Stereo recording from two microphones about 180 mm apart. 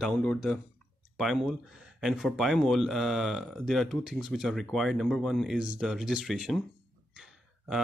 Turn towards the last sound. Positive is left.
turn(degrees=0)  # may be behind; listen again after turning